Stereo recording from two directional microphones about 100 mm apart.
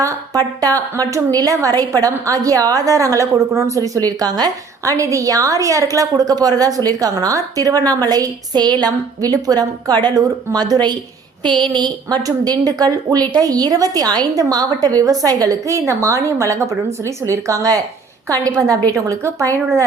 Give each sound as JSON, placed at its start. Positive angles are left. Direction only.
{"t": 0.0, "sound": "a woman's voice", "side_deg": -35}